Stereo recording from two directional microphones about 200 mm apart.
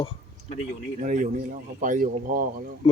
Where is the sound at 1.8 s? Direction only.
40° right (ahead or behind).